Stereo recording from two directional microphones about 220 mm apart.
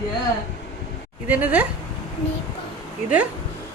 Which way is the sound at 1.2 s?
5° right (ahead or behind).